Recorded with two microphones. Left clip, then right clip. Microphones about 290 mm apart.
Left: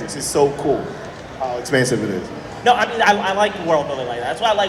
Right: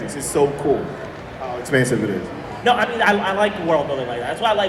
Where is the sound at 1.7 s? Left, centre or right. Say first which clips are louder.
Right 1 dB; left.